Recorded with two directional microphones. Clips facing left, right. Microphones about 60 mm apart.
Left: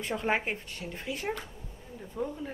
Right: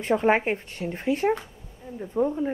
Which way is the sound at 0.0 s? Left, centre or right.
Right.